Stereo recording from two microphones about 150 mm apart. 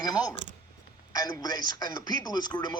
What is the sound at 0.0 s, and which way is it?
A man's voice, 25° left (ahead or behind).